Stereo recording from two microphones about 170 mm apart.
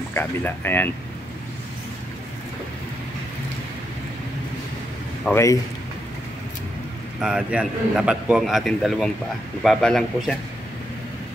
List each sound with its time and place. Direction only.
0.1 s speech: 10° left (ahead or behind)
5.3 s speech: 15° left (ahead or behind)
7.2 s a man's voice: 5° right (ahead or behind)